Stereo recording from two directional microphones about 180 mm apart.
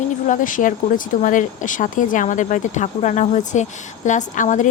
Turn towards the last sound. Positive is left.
turn(degrees=45)  # may be behind; listen again after turning